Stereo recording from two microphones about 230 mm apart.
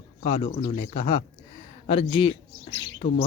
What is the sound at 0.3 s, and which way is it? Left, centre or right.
Speech, left.